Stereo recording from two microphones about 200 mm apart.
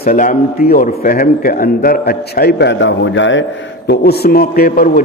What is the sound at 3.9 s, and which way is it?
A man's voice, 50° left (ahead or behind).